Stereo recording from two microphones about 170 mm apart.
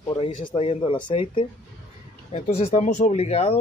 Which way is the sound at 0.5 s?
35° left (ahead or behind).